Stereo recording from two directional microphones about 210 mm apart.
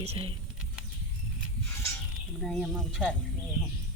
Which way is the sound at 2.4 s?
Centre (ahead or behind).